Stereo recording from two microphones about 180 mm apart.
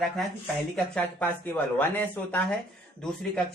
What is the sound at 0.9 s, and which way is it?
Speech, 10° left (ahead or behind).